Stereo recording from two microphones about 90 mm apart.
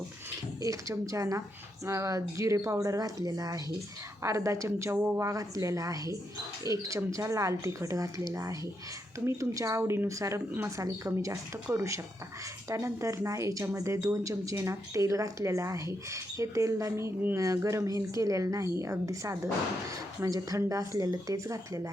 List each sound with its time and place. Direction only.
0.6 s speech: 35° right (ahead or behind)